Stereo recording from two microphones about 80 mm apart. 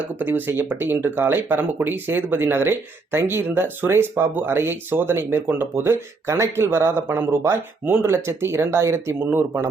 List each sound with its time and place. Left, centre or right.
0.0 s speech: right